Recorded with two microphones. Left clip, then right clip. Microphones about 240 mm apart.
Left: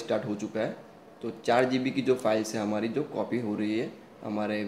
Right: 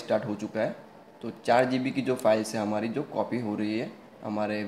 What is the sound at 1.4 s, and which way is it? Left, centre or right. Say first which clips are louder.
Speech: right 1 dB; centre.